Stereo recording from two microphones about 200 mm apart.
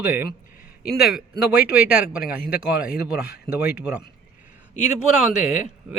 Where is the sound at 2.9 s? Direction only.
50° left (ahead or behind).